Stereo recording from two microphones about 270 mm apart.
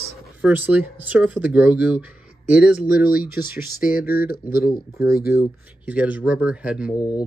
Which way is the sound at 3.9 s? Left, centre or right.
Left.